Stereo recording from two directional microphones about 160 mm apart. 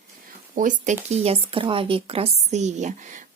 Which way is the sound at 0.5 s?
50° right (ahead or behind).